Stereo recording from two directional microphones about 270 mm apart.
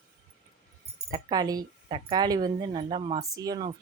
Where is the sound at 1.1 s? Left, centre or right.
Centre.